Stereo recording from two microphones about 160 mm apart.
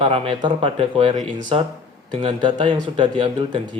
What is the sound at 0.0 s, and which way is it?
Speech, 35° right (ahead or behind).